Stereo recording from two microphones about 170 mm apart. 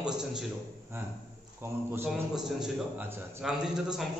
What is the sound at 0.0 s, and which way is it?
Speech, 5° right (ahead or behind).